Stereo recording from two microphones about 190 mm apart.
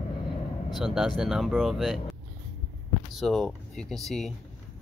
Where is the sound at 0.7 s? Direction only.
Centre (ahead or behind).